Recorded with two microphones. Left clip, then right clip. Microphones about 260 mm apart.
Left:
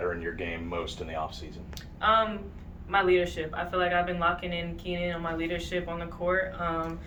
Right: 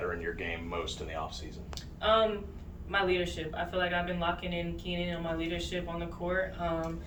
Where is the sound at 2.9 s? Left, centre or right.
Centre.